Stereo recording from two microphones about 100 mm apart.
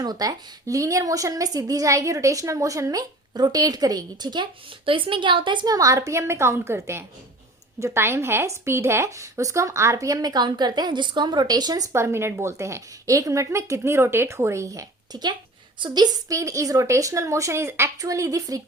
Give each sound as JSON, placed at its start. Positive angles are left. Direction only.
{"t": 0.0, "sound": "a woman's voice", "side_deg": -40}
{"t": 4.9, "sound": "a woman's voice", "side_deg": -60}
{"t": 5.7, "sound": "a woman's voice", "side_deg": -35}
{"t": 11.9, "sound": "a woman's voice", "side_deg": -25}